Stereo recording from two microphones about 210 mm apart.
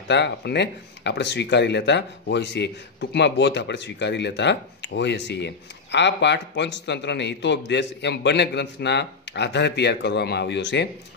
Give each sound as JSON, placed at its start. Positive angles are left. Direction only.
{"t": 0.1, "sound": "speech", "side_deg": 55}